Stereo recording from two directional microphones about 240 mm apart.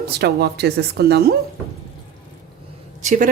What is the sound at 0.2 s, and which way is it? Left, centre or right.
Speech, right.